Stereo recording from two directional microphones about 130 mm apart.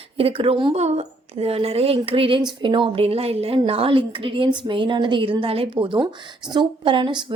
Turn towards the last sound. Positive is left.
turn(degrees=-35)  # may be behind; listen again after turning